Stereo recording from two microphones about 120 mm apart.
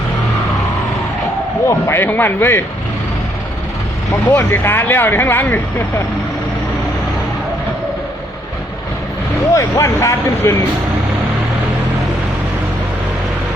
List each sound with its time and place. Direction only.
1.9 s speech: 15° left (ahead or behind)
4.3 s speech: 15° left (ahead or behind)
9.6 s speech: 25° left (ahead or behind)